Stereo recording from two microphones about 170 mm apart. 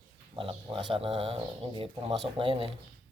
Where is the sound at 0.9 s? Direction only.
35° right (ahead or behind).